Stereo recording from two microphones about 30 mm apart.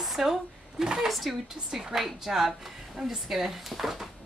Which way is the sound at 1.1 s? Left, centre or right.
Centre.